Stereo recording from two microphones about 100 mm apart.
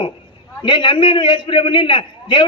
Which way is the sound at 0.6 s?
55° left (ahead or behind).